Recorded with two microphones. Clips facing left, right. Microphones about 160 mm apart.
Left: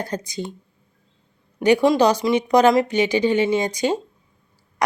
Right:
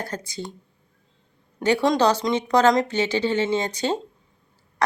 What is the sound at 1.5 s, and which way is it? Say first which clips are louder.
Speech: left 4 dB; 15° left (ahead or behind).